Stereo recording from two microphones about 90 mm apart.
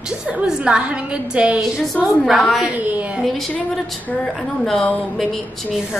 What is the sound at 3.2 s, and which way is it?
A woman's voice, centre (ahead or behind).